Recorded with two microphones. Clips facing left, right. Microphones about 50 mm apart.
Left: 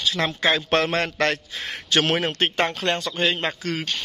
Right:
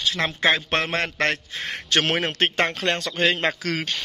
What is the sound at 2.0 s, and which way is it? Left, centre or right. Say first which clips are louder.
Speech: left 1 dB; right.